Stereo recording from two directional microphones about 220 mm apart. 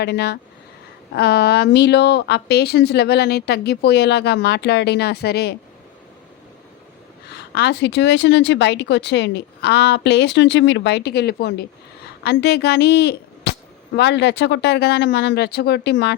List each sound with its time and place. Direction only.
0.0 s a woman's voice: 50° left (ahead or behind)
7.5 s a woman's voice: 50° left (ahead or behind)